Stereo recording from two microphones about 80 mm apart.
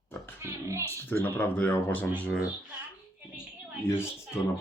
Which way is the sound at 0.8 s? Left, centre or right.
Left.